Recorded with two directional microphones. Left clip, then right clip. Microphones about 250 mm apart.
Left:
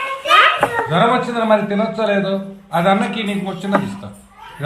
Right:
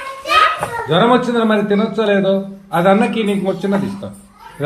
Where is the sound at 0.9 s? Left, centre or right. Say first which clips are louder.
Right 6 dB; right.